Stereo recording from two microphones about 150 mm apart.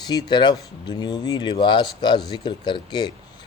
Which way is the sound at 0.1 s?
30° left (ahead or behind).